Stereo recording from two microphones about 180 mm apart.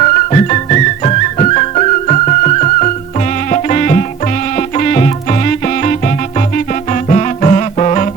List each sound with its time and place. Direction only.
0.0 s music: 35° left (ahead or behind)